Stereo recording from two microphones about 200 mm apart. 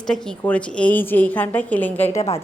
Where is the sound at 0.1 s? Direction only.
5° left (ahead or behind).